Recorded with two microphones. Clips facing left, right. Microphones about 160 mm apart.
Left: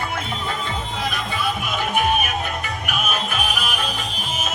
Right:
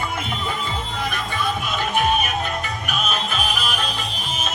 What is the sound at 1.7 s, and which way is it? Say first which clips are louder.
Music: even; 10° left (ahead or behind).